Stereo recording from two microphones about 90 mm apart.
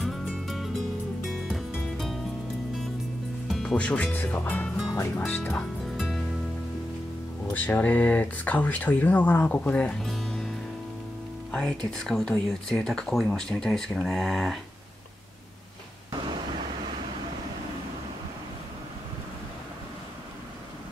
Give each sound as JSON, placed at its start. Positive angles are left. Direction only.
{"t": 0.0, "sound": "music", "side_deg": 0}
{"t": 3.4, "sound": "music", "side_deg": 5}
{"t": 3.7, "sound": "speech", "side_deg": 15}
{"t": 5.9, "sound": "music", "side_deg": 0}
{"t": 7.5, "sound": "speech", "side_deg": 20}
{"t": 9.9, "sound": "music", "side_deg": 5}
{"t": 11.5, "sound": "speech", "side_deg": 10}